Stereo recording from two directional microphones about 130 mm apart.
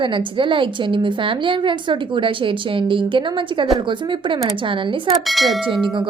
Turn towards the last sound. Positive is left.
turn(degrees=-40)  # may be behind; listen again after turning